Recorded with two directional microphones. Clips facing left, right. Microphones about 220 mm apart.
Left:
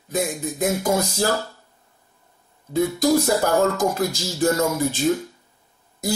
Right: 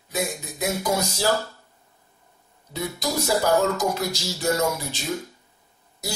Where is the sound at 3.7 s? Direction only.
50° left (ahead or behind).